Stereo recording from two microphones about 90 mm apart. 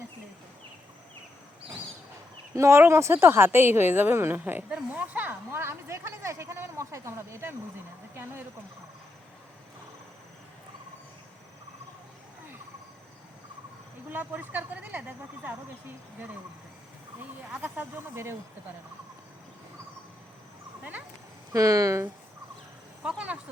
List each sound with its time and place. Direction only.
2.6 s speech: 30° right (ahead or behind)
14.1 s speech: 20° right (ahead or behind)
17.6 s speech: 20° right (ahead or behind)
21.5 s speech: 40° right (ahead or behind)
23.0 s speech: 10° right (ahead or behind)